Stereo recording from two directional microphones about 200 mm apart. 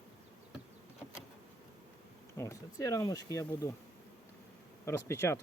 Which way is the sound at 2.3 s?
15° left (ahead or behind).